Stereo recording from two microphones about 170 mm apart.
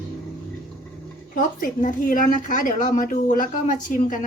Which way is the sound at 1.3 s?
50° left (ahead or behind).